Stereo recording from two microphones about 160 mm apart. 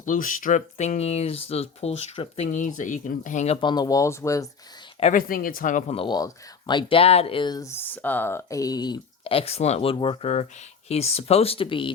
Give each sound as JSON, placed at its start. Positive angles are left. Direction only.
{"t": 0.0, "sound": "speech", "side_deg": 55}
{"t": 3.6, "sound": "speech", "side_deg": 25}
{"t": 5.1, "sound": "speech", "side_deg": 60}
{"t": 5.9, "sound": "speech", "side_deg": 30}